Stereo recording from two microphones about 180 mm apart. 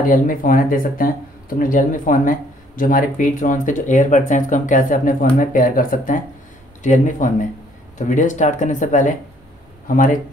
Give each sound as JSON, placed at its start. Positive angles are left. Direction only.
{"t": 0.0, "sound": "speech", "side_deg": 50}